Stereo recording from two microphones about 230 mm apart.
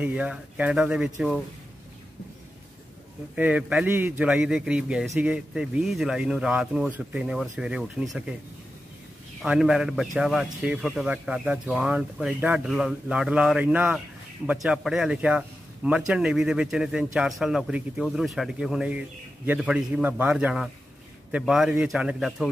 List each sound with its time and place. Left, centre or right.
0.0 s speech: centre
3.3 s speech: centre
9.4 s speech: centre